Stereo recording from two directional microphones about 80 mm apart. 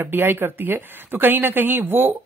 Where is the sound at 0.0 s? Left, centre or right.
Right.